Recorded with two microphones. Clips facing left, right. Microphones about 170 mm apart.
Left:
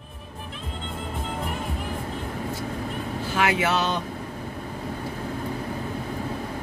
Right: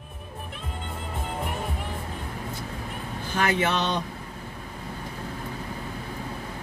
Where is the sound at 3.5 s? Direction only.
5° left (ahead or behind).